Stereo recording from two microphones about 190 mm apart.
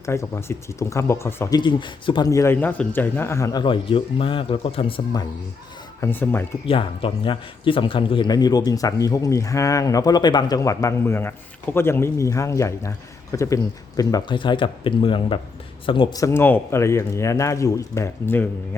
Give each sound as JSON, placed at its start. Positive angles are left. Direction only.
{"t": 0.0, "sound": "speech", "side_deg": 15}
{"t": 6.0, "sound": "speech", "side_deg": 10}
{"t": 6.7, "sound": "speech", "side_deg": 30}